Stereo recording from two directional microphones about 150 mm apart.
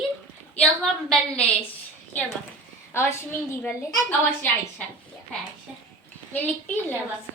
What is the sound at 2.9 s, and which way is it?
Speech, 15° left (ahead or behind).